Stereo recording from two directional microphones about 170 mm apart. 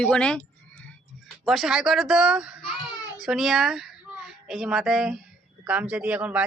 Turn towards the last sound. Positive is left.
turn(degrees=-10)  # may be behind; listen again after turning